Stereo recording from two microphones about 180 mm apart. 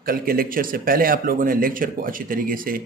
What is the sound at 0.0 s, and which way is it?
Speech, 55° right (ahead or behind).